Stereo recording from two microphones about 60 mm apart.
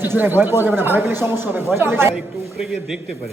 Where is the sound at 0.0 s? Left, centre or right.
Right.